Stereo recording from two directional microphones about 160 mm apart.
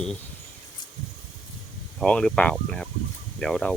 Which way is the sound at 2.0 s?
5° left (ahead or behind).